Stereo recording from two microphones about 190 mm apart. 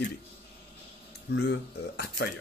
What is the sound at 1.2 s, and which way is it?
Speech, 65° left (ahead or behind).